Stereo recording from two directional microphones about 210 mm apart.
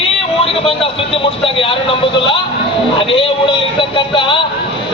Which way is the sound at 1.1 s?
25° left (ahead or behind).